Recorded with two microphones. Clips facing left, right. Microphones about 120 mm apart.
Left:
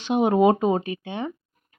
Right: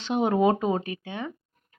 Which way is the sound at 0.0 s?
15° left (ahead or behind).